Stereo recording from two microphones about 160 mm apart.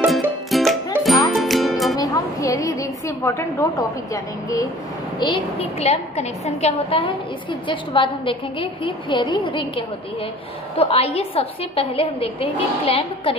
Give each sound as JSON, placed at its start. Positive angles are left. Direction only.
{"t": 0.0, "sound": "music", "side_deg": 0}
{"t": 2.0, "sound": "music", "side_deg": 20}
{"t": 4.1, "sound": "a woman's voice", "side_deg": 20}
{"t": 5.2, "sound": "a woman's voice", "side_deg": 35}